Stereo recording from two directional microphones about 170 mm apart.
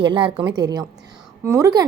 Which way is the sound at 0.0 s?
30° right (ahead or behind).